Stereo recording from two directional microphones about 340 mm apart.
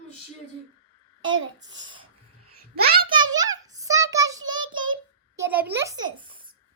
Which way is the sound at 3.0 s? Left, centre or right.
Centre.